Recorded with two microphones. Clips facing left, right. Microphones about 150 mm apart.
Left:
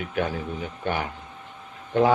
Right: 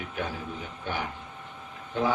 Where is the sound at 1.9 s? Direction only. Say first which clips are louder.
Left 7 dB; 65° left (ahead or behind).